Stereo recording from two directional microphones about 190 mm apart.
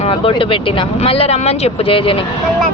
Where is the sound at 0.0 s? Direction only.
30° left (ahead or behind).